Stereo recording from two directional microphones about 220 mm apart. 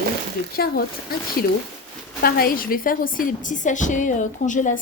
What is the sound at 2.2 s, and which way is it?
A woman's voice, 40° left (ahead or behind).